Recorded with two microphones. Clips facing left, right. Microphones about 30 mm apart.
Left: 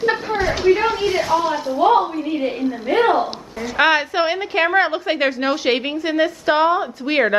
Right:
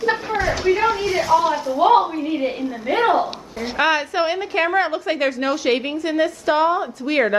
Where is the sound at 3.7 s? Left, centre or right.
Left.